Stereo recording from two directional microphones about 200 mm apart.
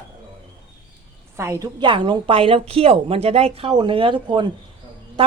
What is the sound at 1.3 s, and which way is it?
A woman's voice, 15° right (ahead or behind).